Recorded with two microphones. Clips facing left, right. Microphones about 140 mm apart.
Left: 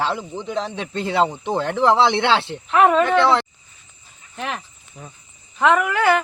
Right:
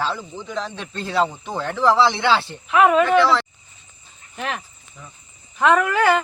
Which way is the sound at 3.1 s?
20° left (ahead or behind).